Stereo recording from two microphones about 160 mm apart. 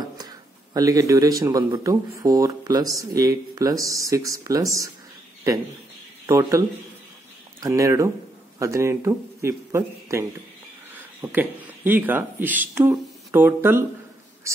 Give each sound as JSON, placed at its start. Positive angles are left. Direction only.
{"t": 0.7, "sound": "speech", "side_deg": -20}
{"t": 6.2, "sound": "speech", "side_deg": -20}
{"t": 7.6, "sound": "speech", "side_deg": -20}